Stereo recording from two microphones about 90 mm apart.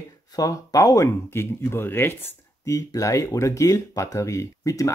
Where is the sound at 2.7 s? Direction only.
35° left (ahead or behind).